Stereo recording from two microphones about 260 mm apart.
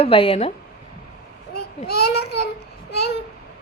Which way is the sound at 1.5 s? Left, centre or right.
Left.